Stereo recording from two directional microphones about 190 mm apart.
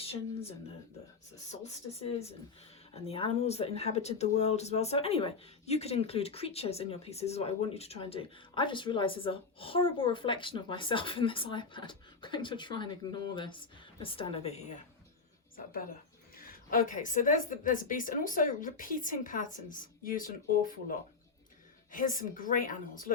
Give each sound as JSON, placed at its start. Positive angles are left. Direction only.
{"t": 1.5, "sound": "speech", "side_deg": 35}
{"t": 16.3, "sound": "speech", "side_deg": 50}
{"t": 21.9, "sound": "speech", "side_deg": 45}